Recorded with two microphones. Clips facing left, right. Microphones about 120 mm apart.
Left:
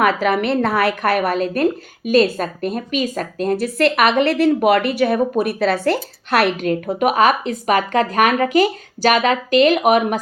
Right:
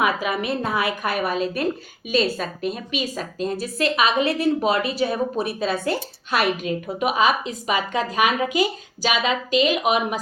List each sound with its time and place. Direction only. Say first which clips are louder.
0.0 s a woman's voice: left 6 dB; 70° left (ahead or behind)